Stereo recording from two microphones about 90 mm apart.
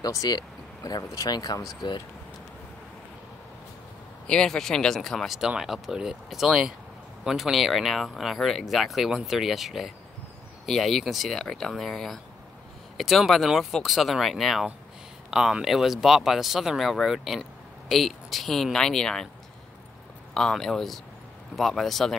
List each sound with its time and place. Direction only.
0.0 s speech: 45° left (ahead or behind)
4.3 s speech: 5° left (ahead or behind)
20.3 s speech: 5° left (ahead or behind)